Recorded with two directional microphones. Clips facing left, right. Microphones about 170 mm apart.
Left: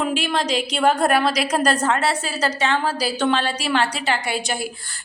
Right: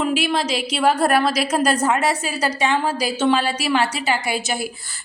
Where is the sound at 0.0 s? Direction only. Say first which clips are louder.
Right 2 dB; 5° right (ahead or behind).